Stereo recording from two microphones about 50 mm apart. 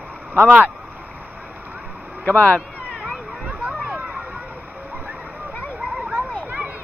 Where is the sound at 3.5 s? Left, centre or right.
Right.